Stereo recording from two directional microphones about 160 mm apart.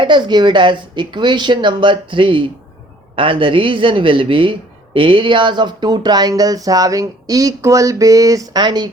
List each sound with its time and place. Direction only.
0.0 s speech: 30° right (ahead or behind)